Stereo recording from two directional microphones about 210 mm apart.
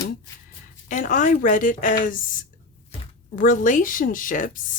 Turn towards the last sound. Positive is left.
turn(degrees=40)  # may be behind; listen again after turning